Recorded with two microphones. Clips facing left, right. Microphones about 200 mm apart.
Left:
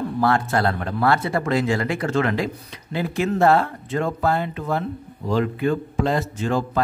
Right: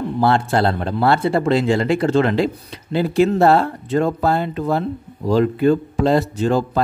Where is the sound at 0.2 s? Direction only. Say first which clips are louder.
Right 4 dB; 30° right (ahead or behind).